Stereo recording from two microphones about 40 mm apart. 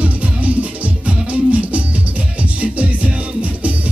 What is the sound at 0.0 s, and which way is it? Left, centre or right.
Music, right.